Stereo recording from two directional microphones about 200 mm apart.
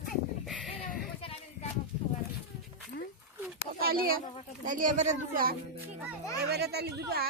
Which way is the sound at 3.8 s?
50° right (ahead or behind).